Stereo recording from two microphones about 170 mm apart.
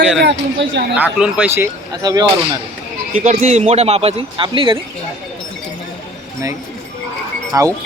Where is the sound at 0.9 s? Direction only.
10° right (ahead or behind).